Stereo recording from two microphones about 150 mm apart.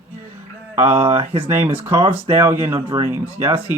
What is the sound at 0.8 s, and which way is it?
Speech, 35° right (ahead or behind).